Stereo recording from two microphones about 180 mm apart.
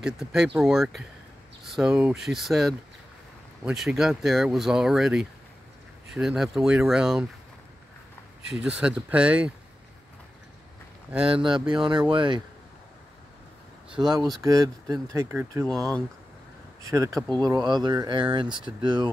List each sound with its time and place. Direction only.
0.0 s speech: centre (ahead or behind)
8.5 s speech: 5° right (ahead or behind)
11.2 s speech: 30° right (ahead or behind)
14.0 s speech: 20° right (ahead or behind)
15.6 s speech: 5° left (ahead or behind)
16.8 s speech: 15° right (ahead or behind)